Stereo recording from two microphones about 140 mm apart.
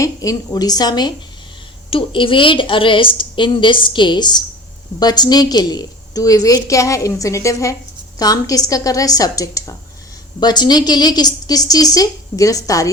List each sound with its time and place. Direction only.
0.0 s a woman's voice: 25° left (ahead or behind)